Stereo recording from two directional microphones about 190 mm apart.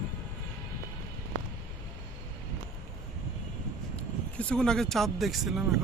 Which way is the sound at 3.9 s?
5° left (ahead or behind).